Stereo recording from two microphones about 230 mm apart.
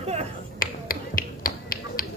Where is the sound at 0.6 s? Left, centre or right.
Left.